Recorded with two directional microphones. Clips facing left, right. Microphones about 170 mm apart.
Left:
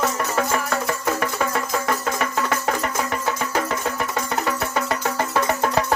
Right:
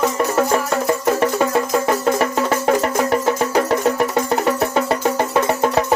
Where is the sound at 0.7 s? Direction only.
25° right (ahead or behind).